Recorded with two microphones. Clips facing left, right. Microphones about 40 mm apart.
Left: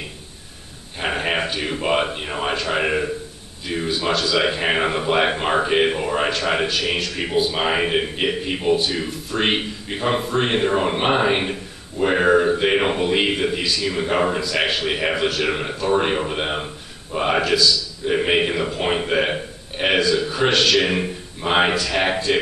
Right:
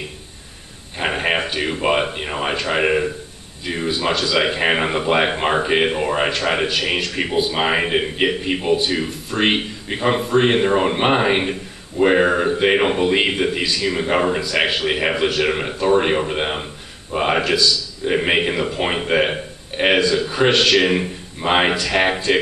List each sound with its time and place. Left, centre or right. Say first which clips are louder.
0.9 s a sound: right 2 dB; centre
1.4 s speech: right 2 dB; centre
8.8 s speech: right 2 dB; centre